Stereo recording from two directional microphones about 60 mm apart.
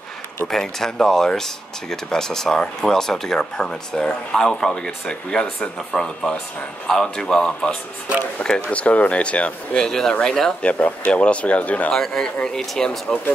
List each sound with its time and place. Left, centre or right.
0.5 s speech: centre
9.8 s speech: centre
10.7 s speech: left
11.9 s speech: centre